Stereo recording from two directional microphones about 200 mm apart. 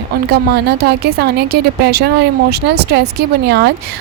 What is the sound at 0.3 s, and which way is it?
A woman's voice, 55° right (ahead or behind).